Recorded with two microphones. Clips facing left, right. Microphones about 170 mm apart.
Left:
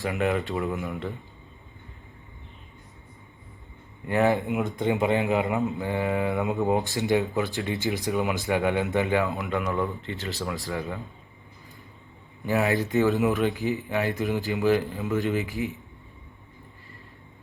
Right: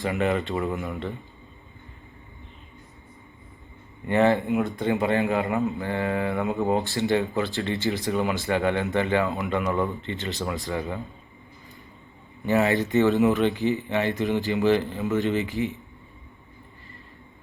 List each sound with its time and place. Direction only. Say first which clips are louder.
0.0 s speech: right 1 dB; 5° left (ahead or behind)
4.0 s speech: right 2 dB; 5° left (ahead or behind)
4.4 s speech: right 3 dB; 20° left (ahead or behind)
4.8 s mantra: left 2 dB; 15° left (ahead or behind)
6.8 s mantra: right 1 dB; 15° left (ahead or behind)
8.1 s speech: even; 5° left (ahead or behind)
12.5 s speech: right 2 dB; centre (ahead or behind)